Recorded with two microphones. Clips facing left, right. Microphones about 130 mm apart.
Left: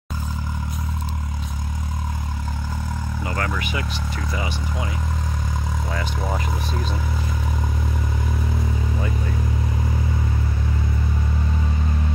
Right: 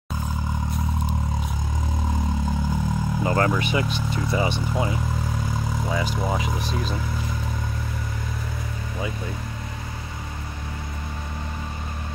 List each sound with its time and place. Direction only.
3.3 s speech: 30° right (ahead or behind)
5.9 s speech: 5° right (ahead or behind)